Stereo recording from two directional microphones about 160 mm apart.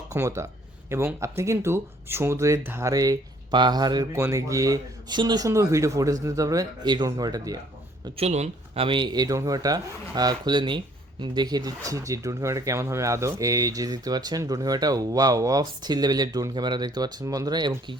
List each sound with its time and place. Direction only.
0.1 s speech: 20° right (ahead or behind)
8.1 s speech: 40° right (ahead or behind); by 17.9 s 25° right (ahead or behind)